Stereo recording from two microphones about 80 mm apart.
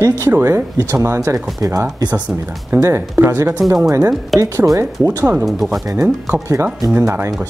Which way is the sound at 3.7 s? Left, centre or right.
Right.